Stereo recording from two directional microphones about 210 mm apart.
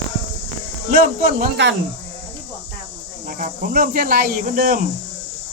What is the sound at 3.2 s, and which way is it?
Speech, 40° right (ahead or behind).